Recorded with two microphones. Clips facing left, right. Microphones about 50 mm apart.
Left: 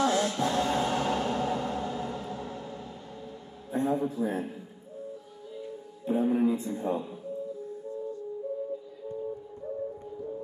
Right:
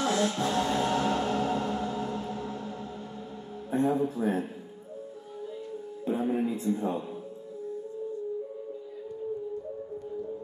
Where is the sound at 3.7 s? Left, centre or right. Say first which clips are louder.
Right 2 dB; right.